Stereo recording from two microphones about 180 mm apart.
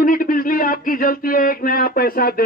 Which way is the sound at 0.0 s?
50° left (ahead or behind).